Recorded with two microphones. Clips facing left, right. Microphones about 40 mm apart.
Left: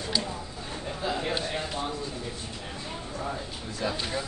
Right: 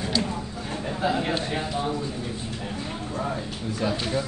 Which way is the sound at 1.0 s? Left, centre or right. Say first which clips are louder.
Right 5 dB; right.